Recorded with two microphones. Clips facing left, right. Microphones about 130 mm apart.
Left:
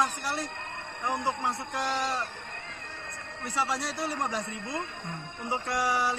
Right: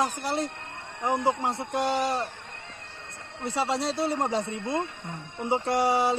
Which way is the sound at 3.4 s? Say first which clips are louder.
Right 4 dB; 25° right (ahead or behind).